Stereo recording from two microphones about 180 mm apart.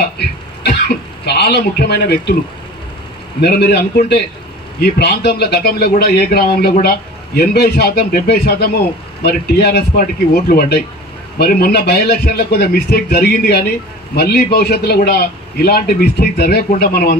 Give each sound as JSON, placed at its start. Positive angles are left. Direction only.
{"t": 0.2, "sound": "throat clearing", "side_deg": 65}
{"t": 3.3, "sound": "a man's voice", "side_deg": 65}